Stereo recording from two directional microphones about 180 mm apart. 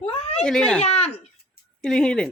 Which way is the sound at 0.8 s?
35° left (ahead or behind).